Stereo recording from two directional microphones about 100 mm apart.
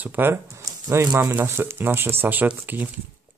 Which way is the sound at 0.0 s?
20° right (ahead or behind).